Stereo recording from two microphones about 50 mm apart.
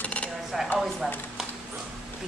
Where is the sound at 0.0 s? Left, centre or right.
Left.